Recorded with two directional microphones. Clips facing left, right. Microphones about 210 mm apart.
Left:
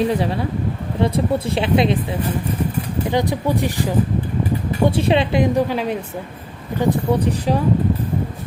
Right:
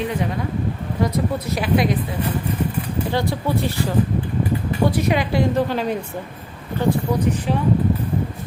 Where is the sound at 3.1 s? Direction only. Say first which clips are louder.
Left 3 dB; 15° left (ahead or behind).